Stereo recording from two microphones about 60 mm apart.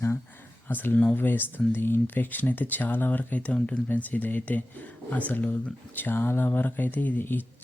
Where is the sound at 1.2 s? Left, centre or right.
Left.